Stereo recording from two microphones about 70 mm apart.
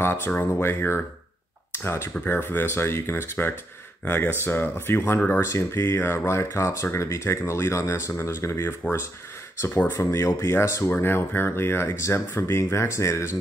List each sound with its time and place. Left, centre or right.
0.0 s speech: left